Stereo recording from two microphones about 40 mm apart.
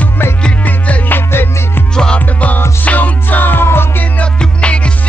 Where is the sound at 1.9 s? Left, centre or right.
Centre.